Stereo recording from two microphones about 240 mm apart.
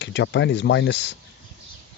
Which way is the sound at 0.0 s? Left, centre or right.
Left.